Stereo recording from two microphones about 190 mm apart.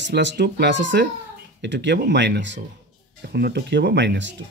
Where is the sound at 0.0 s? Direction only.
65° right (ahead or behind).